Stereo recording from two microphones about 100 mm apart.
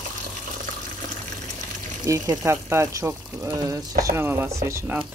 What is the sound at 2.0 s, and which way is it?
Speech, 35° right (ahead or behind).